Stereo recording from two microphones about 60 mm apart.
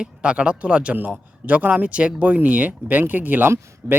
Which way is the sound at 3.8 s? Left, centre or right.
Right.